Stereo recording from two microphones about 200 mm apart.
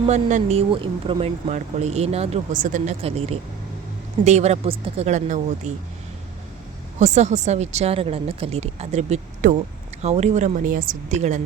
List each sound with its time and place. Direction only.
0.1 s speech: 35° right (ahead or behind)
7.0 s speech: 35° right (ahead or behind)